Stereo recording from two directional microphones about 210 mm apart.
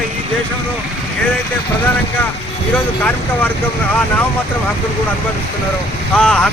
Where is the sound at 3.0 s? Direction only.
10° left (ahead or behind).